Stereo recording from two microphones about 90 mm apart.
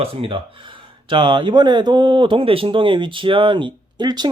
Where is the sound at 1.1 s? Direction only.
65° right (ahead or behind).